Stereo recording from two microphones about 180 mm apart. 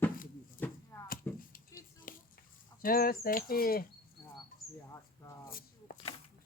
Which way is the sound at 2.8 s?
55° left (ahead or behind).